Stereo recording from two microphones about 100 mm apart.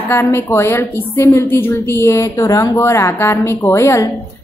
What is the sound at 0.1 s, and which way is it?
A woman's voice, 25° left (ahead or behind).